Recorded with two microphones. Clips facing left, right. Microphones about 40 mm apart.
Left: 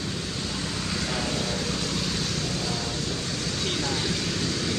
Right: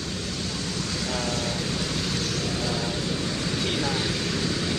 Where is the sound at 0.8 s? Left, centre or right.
Centre.